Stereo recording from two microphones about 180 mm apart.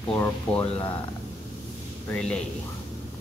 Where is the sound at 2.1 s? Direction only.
5° left (ahead or behind).